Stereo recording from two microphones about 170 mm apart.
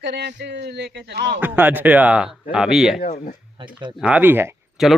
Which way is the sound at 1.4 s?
10° right (ahead or behind).